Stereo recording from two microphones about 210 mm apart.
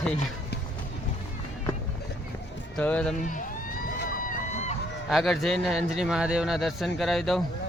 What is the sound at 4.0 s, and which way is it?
Run, 40° left (ahead or behind).